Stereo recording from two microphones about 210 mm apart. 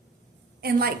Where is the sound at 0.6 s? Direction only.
45° right (ahead or behind).